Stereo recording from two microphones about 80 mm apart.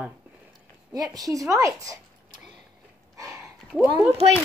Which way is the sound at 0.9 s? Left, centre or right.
Right.